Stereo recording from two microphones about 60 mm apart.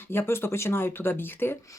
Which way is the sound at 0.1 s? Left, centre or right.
Left.